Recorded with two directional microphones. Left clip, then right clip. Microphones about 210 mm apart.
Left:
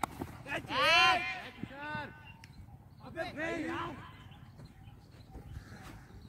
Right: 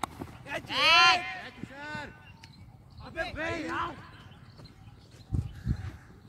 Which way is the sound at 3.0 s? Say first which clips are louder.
Right 4 dB; 45° right (ahead or behind).